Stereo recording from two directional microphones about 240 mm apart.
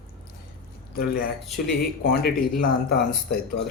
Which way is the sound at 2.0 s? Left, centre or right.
Left.